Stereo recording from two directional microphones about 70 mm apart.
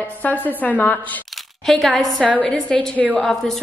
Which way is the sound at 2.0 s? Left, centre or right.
Centre.